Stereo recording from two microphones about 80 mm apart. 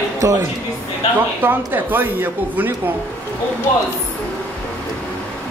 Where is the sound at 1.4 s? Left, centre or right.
Right.